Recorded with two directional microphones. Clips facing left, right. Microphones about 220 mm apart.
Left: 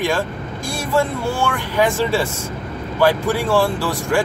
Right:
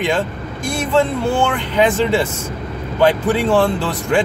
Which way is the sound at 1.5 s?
20° right (ahead or behind).